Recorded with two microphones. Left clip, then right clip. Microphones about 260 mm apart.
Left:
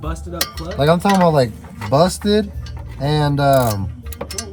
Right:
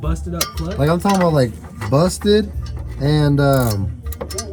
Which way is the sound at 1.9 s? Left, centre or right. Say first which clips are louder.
Even; left.